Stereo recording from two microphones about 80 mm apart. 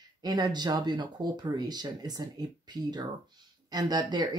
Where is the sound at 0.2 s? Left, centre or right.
Right.